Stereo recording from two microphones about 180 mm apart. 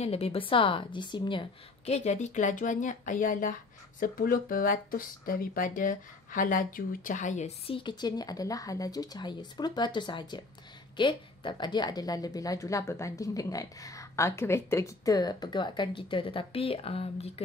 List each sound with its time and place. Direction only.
0.0 s a woman's voice: 35° left (ahead or behind)